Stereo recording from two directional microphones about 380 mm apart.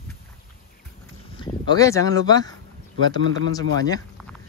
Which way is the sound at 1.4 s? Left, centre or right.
Centre.